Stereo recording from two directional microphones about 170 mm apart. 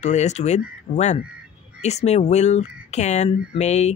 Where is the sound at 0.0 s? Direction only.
40° left (ahead or behind).